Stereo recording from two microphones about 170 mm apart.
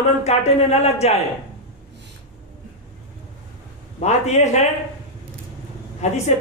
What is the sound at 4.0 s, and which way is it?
Speech, 40° left (ahead or behind).